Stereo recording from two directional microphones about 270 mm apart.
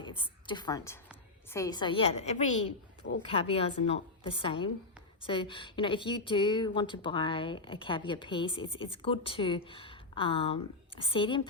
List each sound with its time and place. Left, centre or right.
0.0 s a woman's voice: centre